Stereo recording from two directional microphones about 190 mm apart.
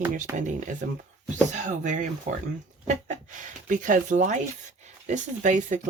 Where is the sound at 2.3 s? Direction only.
40° right (ahead or behind).